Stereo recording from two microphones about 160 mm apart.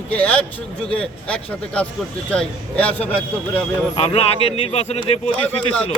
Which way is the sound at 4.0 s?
40° left (ahead or behind).